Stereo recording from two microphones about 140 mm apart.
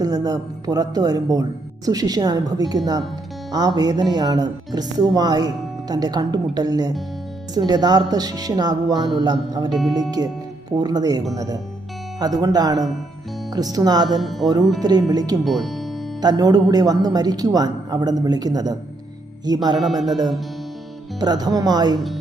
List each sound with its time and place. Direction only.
0.0 s speech: 25° right (ahead or behind)
14.2 s music: centre (ahead or behind)
14.4 s speech: 30° right (ahead or behind)
15.4 s music: centre (ahead or behind)
16.2 s speech: 30° right (ahead or behind)
19.8 s music: centre (ahead or behind)
20.1 s speech: 30° right (ahead or behind)
21.9 s music: centre (ahead or behind)